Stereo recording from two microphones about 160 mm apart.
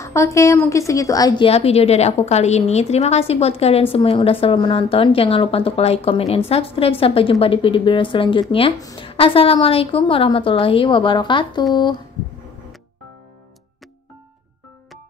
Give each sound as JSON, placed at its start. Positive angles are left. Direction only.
{"t": 0.0, "sound": "a woman's voice", "side_deg": 20}
{"t": 1.5, "sound": "a woman's voice", "side_deg": 40}